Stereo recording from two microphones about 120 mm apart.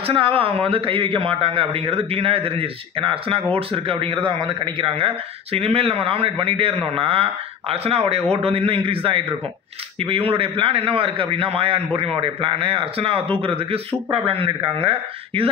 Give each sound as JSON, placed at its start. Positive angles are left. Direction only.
{"t": 0.0, "sound": "a man's voice", "side_deg": -50}